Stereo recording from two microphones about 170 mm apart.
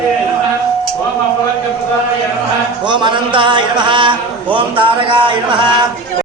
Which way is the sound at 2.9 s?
25° right (ahead or behind).